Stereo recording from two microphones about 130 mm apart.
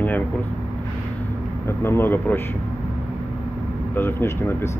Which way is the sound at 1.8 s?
15° left (ahead or behind).